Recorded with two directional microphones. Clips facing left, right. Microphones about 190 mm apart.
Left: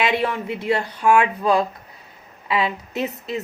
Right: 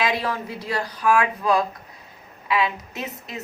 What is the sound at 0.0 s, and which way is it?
Speech, 25° left (ahead or behind).